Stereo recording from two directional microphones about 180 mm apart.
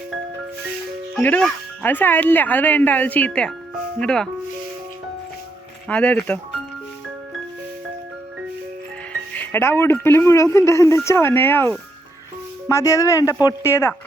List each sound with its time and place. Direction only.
1.1 s speech: 5° left (ahead or behind)
5.9 s speech: 5° left (ahead or behind)
9.3 s speech: 10° left (ahead or behind)